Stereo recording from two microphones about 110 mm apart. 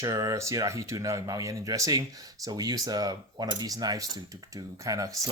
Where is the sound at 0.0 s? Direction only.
30° right (ahead or behind).